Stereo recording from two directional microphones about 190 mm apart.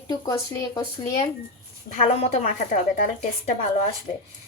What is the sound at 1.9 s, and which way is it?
A woman's voice, 35° left (ahead or behind).